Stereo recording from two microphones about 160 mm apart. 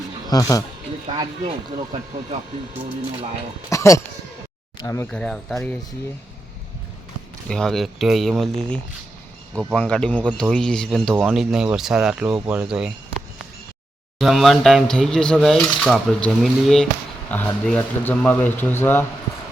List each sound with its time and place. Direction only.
0.3 s speech: 20° left (ahead or behind)
1.2 s speech: 35° right (ahead or behind)
3.7 s speech: 20° left (ahead or behind)
5.1 s speech: 5° left (ahead or behind)
7.5 s speech: 5° left (ahead or behind)
14.2 s speech: centre (ahead or behind)